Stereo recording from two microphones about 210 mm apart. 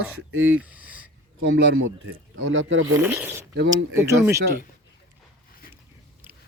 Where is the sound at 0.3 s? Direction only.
70° right (ahead or behind).